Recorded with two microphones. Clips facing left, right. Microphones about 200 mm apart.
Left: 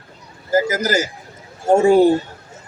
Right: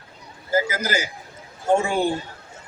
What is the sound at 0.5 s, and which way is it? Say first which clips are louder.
Speech: left 5 dB; 40° left (ahead or behind).